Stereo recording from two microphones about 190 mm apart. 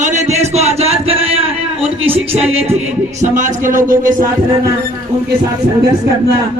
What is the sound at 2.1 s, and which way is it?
Speech, 10° right (ahead or behind).